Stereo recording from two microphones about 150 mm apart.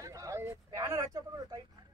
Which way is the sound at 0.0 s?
20° right (ahead or behind).